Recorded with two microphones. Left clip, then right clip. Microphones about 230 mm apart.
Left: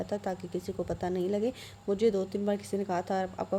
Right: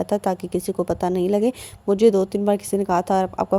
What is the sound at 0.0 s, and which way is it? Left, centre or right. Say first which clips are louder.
A woman's voice: right 12 dB; right.